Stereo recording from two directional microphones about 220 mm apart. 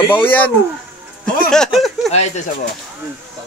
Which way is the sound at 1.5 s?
Centre (ahead or behind).